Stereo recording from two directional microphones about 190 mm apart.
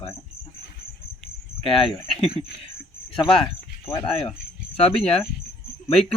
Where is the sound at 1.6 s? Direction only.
30° left (ahead or behind).